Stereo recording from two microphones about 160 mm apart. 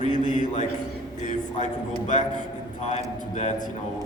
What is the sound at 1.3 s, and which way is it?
Speech, 50° left (ahead or behind).